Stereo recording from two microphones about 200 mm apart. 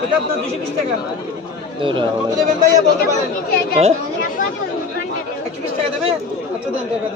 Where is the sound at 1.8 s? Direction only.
25° right (ahead or behind).